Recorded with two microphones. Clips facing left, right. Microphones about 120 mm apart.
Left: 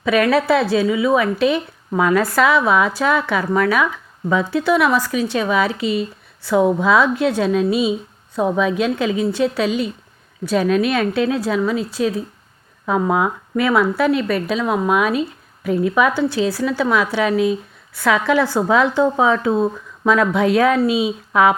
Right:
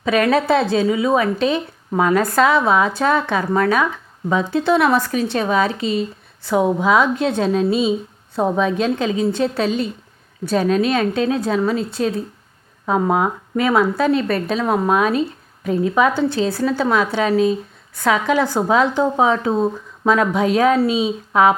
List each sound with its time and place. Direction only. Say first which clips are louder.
0.0 s a woman's voice: left 1 dB; 30° right (ahead or behind)
4.9 s a woman's voice: right 1 dB; 55° right (ahead or behind); by 11.4 s 30° right (ahead or behind)
11.4 s a woman's voice: even; 40° right (ahead or behind)
11.9 s speech: left 1 dB; 55° right (ahead or behind)
12.8 s a woman's voice: even; 35° right (ahead or behind)
14.4 s a woman's voice: right 1 dB; 40° right (ahead or behind)
16.1 s speech: even; 50° right (ahead or behind)
16.6 s a woman's voice: even; 35° right (ahead or behind)
18.0 s a woman's voice: left 1 dB; 20° right (ahead or behind)